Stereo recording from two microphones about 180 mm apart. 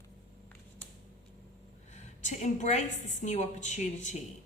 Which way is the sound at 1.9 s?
40° left (ahead or behind).